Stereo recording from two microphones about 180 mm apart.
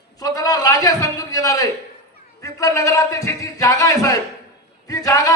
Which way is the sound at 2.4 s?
15° left (ahead or behind).